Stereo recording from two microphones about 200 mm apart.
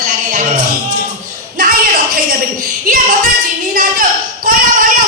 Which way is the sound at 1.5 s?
45° right (ahead or behind).